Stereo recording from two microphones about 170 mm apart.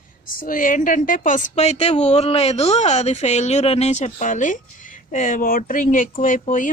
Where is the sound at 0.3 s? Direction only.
55° left (ahead or behind).